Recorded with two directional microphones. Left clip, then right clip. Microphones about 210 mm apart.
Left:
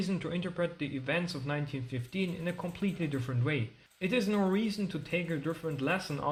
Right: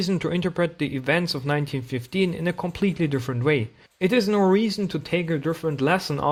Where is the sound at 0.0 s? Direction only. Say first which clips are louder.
Right 11 dB; 45° right (ahead or behind).